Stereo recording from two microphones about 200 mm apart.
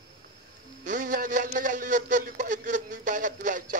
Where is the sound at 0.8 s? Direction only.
40° right (ahead or behind).